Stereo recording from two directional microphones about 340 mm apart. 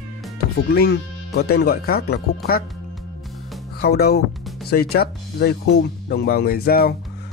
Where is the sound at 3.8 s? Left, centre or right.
Left.